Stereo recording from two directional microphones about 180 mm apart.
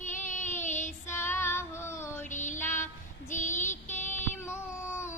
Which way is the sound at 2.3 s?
45° left (ahead or behind).